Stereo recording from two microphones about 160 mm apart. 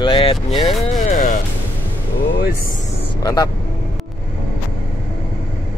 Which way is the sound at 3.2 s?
20° left (ahead or behind).